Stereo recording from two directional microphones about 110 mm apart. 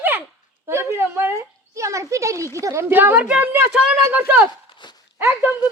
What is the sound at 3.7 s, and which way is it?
Speech, 5° right (ahead or behind).